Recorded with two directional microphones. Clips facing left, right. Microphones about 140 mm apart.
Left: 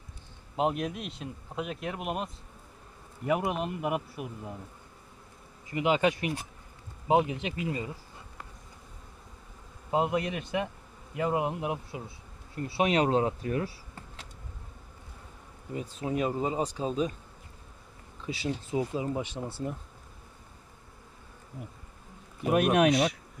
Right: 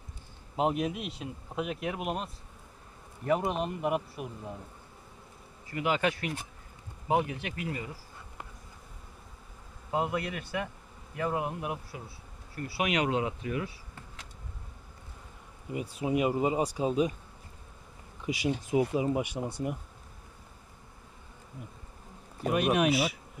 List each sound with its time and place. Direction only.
0.6 s speech: centre (ahead or behind)
3.3 s speech: 10° left (ahead or behind)
5.7 s speech: 20° left (ahead or behind)
9.8 s speech: 20° left (ahead or behind)
15.7 s speech: 10° right (ahead or behind)
18.2 s speech: 15° right (ahead or behind)
22.8 s speech: 5° right (ahead or behind)